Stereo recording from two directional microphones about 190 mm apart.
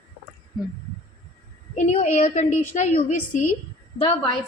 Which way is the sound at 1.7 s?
40° left (ahead or behind).